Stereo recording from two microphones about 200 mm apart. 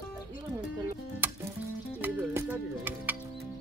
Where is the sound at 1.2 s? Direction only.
10° right (ahead or behind).